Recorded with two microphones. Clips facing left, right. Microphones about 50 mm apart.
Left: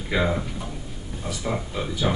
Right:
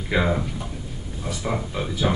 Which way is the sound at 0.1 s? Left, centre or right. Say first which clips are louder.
Right 1 dB; centre.